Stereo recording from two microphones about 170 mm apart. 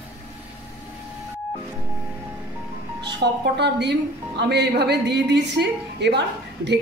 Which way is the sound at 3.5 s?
85° right.